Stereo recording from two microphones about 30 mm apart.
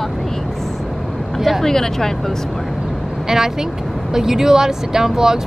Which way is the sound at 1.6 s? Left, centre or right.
Centre.